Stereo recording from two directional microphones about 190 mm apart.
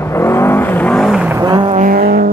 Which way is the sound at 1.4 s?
25° right (ahead or behind).